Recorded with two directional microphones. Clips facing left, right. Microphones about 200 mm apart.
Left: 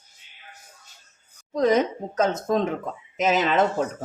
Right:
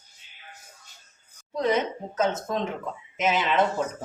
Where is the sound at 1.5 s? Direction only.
40° left (ahead or behind).